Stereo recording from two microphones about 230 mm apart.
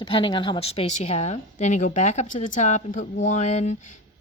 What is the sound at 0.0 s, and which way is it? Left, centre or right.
Speech, left.